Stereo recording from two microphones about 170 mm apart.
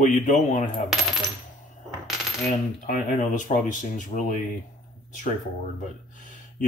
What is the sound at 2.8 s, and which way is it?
Speech, 50° left (ahead or behind).